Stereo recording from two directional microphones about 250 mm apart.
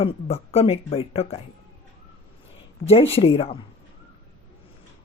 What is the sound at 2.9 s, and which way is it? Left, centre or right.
Speech, left.